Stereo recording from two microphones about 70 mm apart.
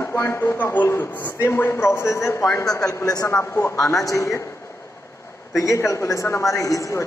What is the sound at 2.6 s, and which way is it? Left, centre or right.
Speech, left.